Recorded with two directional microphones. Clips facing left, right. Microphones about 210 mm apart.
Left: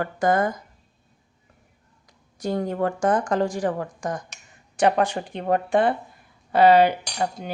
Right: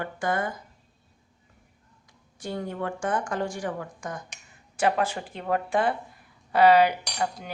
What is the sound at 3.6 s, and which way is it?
Speech, 55° left (ahead or behind).